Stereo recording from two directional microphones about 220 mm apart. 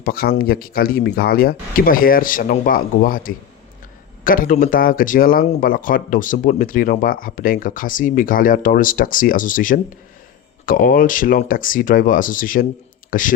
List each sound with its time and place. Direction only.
0.0 s a man's voice: 45° left (ahead or behind)